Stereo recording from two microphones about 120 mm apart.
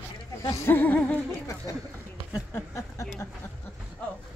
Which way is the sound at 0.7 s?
15° left (ahead or behind).